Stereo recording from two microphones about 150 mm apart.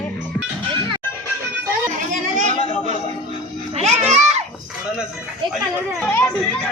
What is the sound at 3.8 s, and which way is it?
Children playing, 45° right (ahead or behind).